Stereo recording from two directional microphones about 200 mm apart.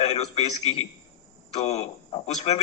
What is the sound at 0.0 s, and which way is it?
A man's voice, 30° left (ahead or behind).